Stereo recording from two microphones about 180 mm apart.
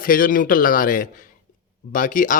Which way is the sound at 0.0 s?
50° left (ahead or behind).